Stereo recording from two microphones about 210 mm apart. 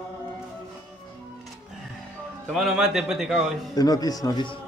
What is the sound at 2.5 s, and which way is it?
Speech, centre (ahead or behind).